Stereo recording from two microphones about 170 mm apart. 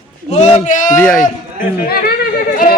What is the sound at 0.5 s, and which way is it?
Speech, 45° left (ahead or behind).